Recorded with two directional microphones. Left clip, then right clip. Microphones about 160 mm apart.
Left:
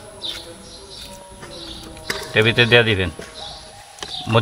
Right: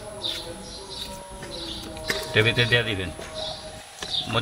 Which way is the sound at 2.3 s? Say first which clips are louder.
Left 7 dB; 25° left (ahead or behind).